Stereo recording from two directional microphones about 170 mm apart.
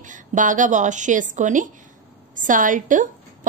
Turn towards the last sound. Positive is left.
turn(degrees=-50)  # may be behind; listen again after turning